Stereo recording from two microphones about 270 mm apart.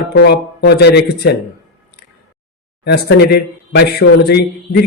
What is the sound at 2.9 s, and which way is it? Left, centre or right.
Speech, left.